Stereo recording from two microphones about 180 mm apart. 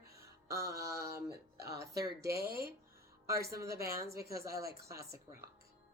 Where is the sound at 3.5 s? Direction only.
15° right (ahead or behind).